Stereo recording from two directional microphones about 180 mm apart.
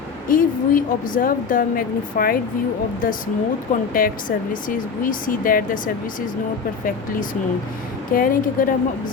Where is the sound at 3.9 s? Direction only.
50° left (ahead or behind).